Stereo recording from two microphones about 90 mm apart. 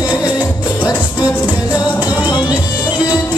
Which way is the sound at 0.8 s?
50° left (ahead or behind).